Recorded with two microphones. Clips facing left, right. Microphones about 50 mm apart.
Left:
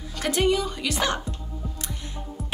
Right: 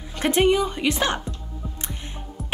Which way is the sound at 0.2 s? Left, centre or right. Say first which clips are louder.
Right 4 dB; right.